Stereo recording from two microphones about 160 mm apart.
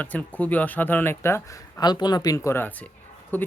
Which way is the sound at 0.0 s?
10° left (ahead or behind).